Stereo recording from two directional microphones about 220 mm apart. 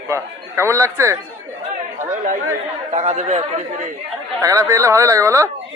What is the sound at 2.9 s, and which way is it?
Speech, 30° right (ahead or behind).